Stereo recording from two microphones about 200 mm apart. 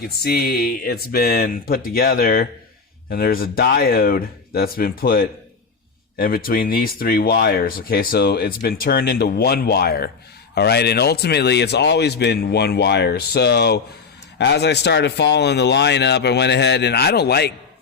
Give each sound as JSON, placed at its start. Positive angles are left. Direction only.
{"t": 0.0, "sound": "speech", "side_deg": 50}